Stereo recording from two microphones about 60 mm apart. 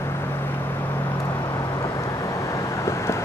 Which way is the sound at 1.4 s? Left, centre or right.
Left.